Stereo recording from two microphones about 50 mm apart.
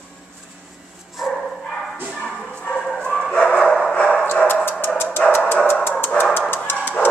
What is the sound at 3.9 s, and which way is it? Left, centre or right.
Dog, left.